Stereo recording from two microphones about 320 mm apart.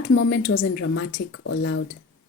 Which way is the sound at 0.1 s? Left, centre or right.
Left.